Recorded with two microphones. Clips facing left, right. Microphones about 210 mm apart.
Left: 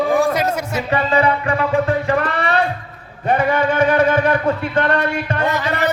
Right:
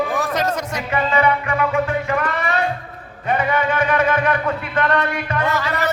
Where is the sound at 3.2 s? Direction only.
30° left (ahead or behind).